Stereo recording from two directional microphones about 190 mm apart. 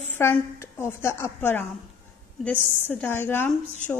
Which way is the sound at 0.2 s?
15° left (ahead or behind).